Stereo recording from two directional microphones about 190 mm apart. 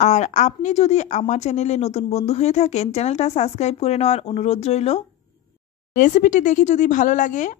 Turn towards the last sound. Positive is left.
turn(degrees=40)  # may be behind; listen again after turning